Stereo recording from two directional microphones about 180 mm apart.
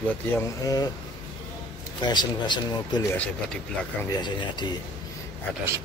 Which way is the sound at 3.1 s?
10° left (ahead or behind).